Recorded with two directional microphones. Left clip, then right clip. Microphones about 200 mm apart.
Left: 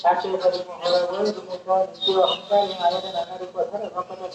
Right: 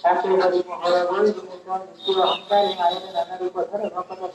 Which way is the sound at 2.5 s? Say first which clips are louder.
Right 1 dB; 45° right (ahead or behind).